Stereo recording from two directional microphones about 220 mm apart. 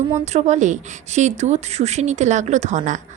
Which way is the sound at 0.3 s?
30° right (ahead or behind).